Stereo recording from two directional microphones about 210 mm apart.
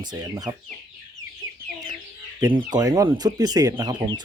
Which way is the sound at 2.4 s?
20° right (ahead or behind).